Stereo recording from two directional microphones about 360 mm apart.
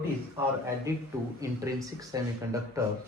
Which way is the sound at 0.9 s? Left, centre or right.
Centre.